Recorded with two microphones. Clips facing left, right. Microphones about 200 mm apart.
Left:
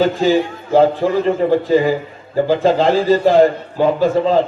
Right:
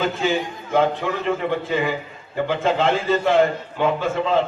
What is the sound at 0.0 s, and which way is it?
A man's voice, 35° left (ahead or behind).